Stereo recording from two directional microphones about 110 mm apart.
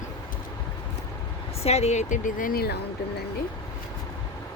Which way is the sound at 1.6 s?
75° left (ahead or behind).